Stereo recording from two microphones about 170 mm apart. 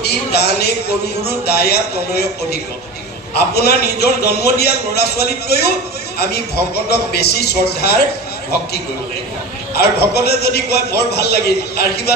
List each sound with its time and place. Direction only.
0.0 s speech: 70° left (ahead or behind)
9.9 s speech: 70° left (ahead or behind)